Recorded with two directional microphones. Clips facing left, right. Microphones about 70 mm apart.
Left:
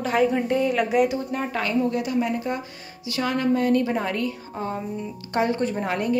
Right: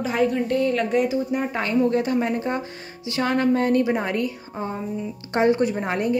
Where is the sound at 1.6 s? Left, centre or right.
Right.